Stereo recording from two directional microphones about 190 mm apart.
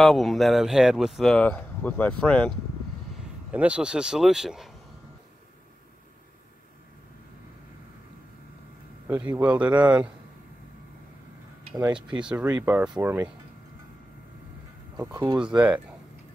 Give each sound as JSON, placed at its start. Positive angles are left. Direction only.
{"t": 0.0, "sound": "speech", "side_deg": 0}
{"t": 3.5, "sound": "speech", "side_deg": -5}
{"t": 9.0, "sound": "a man's voice", "side_deg": -10}
{"t": 12.2, "sound": "a man's voice", "side_deg": -5}
{"t": 15.0, "sound": "speech", "side_deg": -15}
{"t": 15.4, "sound": "speech", "side_deg": -5}